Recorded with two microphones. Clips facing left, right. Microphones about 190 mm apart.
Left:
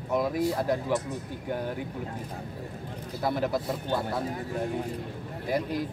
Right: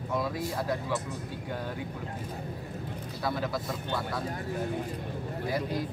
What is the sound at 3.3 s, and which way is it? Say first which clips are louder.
Speech: left 4 dB; 20° left (ahead or behind).